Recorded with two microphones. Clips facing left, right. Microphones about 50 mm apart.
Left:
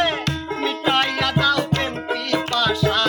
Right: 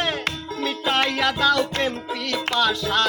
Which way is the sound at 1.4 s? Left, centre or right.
Centre.